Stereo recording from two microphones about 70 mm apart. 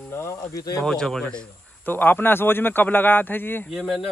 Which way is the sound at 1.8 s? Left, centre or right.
Left.